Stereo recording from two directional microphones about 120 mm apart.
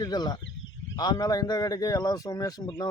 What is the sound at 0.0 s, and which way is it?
A man's voice, 35° left (ahead or behind).